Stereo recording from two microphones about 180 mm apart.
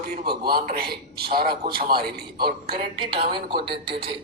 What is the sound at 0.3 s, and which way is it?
A man's voice, 60° right (ahead or behind).